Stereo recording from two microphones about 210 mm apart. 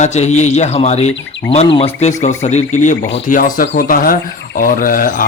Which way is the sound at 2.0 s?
35° left (ahead or behind).